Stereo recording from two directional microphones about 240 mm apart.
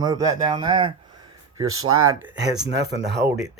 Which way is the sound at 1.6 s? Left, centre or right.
Right.